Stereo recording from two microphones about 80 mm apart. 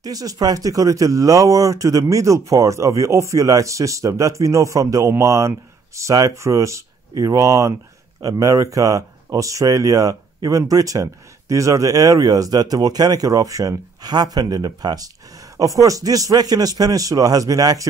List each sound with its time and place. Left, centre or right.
0.0 s speech: right
15.5 s speech: right